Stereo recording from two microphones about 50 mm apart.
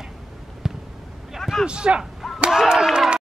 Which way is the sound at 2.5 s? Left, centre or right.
Centre.